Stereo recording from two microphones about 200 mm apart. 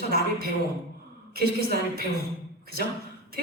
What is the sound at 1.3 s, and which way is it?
Speech, 50° right (ahead or behind).